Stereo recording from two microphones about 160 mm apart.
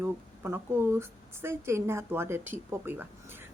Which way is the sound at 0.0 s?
15° right (ahead or behind).